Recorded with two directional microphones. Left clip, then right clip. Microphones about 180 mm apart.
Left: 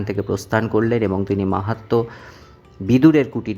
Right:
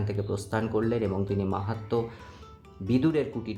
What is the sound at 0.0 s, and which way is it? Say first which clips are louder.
Speech: left 9 dB; 30° left (ahead or behind).